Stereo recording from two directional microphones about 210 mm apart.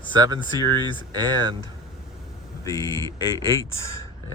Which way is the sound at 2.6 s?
15° left (ahead or behind).